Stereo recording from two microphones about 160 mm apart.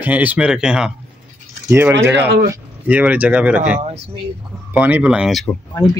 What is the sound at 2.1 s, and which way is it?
Speech, 90° right.